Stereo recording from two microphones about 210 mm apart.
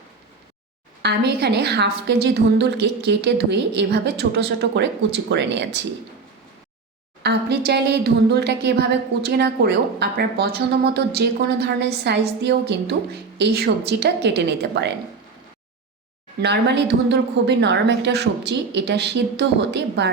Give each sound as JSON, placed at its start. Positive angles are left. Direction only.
{"t": 1.0, "sound": "speech", "side_deg": -50}
{"t": 7.2, "sound": "speech", "side_deg": -50}
{"t": 16.4, "sound": "a woman's voice", "side_deg": -55}